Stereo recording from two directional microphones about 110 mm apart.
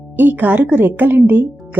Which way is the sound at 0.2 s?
15° right (ahead or behind).